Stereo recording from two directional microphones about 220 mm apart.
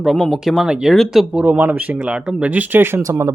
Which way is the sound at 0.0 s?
Centre (ahead or behind).